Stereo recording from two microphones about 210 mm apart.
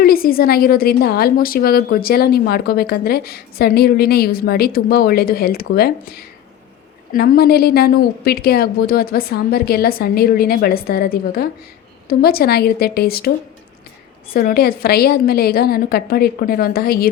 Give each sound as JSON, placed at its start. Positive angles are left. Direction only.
{"t": 0.0, "sound": "a woman's voice", "side_deg": 45}
{"t": 14.3, "sound": "a woman's voice", "side_deg": 45}